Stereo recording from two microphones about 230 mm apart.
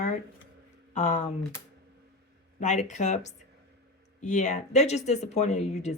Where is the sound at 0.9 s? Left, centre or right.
Left.